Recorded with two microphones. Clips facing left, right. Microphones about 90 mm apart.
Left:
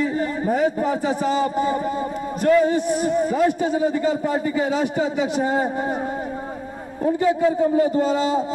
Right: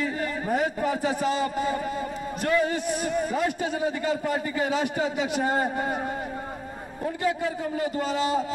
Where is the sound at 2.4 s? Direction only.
25° left (ahead or behind).